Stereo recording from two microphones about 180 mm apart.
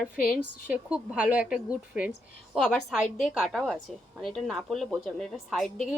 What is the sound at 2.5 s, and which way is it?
A woman's voice, 5° left (ahead or behind).